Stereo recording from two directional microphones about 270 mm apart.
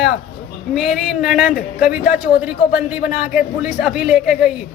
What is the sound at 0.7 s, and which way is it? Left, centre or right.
A man's voice, centre.